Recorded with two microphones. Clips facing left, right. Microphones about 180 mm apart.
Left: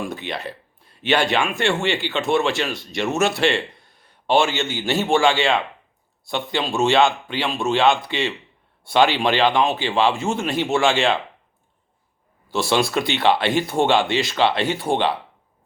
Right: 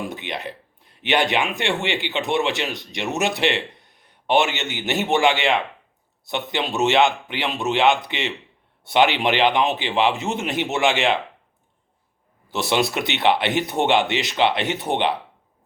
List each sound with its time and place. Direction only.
0.0 s speech: 20° right (ahead or behind)
12.5 s speech: 20° right (ahead or behind)